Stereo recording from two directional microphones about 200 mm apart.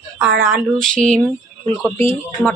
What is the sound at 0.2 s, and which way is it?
Speech, 5° right (ahead or behind).